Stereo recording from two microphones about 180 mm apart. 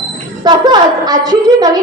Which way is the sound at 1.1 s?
20° right (ahead or behind).